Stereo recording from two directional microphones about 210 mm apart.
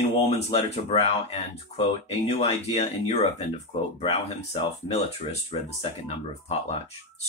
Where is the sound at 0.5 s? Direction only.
30° left (ahead or behind).